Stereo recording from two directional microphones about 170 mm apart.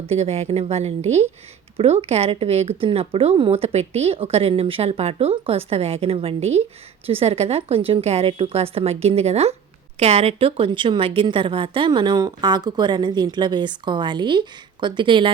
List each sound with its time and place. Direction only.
0.1 s a woman's voice: 40° right (ahead or behind)